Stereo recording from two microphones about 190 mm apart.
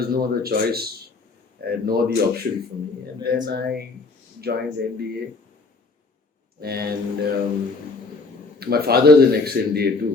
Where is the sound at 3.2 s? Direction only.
55° right (ahead or behind).